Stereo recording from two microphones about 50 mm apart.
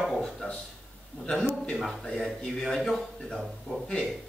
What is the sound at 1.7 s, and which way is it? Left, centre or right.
Speech, centre.